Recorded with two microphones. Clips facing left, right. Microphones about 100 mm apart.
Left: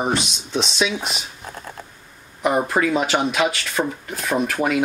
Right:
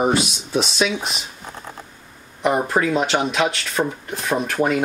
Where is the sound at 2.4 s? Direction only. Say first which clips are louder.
Even; centre (ahead or behind).